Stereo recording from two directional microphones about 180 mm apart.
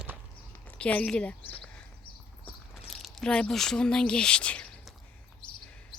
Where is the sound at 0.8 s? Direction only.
5° left (ahead or behind).